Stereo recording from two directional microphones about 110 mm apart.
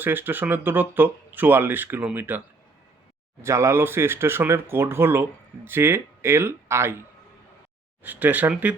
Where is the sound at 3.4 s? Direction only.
25° right (ahead or behind).